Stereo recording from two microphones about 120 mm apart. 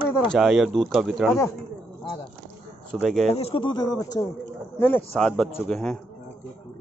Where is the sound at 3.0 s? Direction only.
Centre (ahead or behind).